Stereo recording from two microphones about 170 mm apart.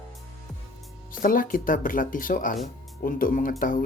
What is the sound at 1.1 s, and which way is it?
Speech, 55° left (ahead or behind).